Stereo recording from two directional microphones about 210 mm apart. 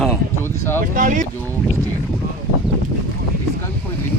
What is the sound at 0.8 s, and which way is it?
Speech, 40° right (ahead or behind).